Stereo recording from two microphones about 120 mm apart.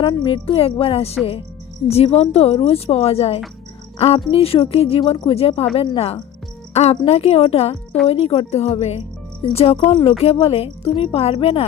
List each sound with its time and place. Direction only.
0.3 s a woman's voice: 50° left (ahead or behind)
9.9 s speech: 45° left (ahead or behind)